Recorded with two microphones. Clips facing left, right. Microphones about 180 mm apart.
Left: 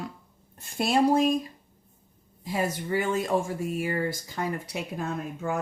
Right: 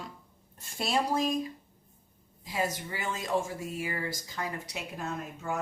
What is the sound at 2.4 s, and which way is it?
Speech, 50° left (ahead or behind).